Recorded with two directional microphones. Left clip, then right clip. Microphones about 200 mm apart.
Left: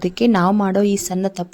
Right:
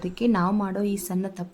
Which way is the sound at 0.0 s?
35° left (ahead or behind).